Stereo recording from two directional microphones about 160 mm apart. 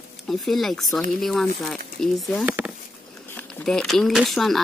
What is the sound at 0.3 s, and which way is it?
Speech, centre (ahead or behind).